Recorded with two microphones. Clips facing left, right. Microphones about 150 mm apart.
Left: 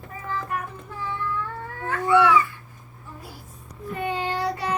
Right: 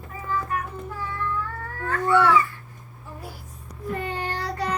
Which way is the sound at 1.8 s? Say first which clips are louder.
Left 1 dB; 20° left (ahead or behind).